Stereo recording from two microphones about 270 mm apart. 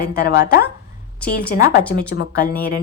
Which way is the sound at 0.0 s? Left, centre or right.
Left.